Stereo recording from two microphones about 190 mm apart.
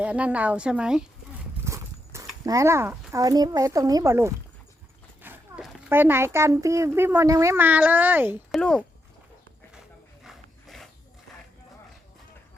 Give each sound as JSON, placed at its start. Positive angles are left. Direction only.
{"t": 0.0, "sound": "a child's voice", "side_deg": -5}
{"t": 1.6, "sound": "horse", "side_deg": -15}
{"t": 2.4, "sound": "a child's voice", "side_deg": -15}
{"t": 5.2, "sound": "a sound", "side_deg": -10}
{"t": 5.9, "sound": "a child's voice", "side_deg": -10}
{"t": 8.5, "sound": "speech", "side_deg": 5}
{"t": 10.2, "sound": "dog", "side_deg": 0}